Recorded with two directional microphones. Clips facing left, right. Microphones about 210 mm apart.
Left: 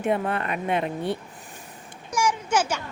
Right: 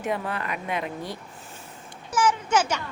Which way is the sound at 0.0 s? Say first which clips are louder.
Left 4 dB; 25° left (ahead or behind).